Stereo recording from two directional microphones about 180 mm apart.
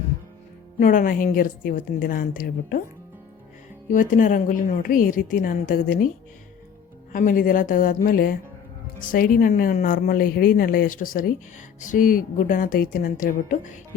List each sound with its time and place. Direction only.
0.8 s a woman's voice: 45° left (ahead or behind)
3.8 s a woman's voice: 45° left (ahead or behind)
7.1 s a woman's voice: 50° left (ahead or behind)